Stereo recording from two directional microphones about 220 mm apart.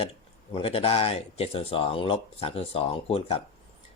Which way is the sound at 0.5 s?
25° left (ahead or behind).